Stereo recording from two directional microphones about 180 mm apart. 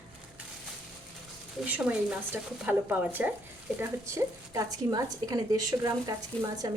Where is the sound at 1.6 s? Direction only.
5° right (ahead or behind).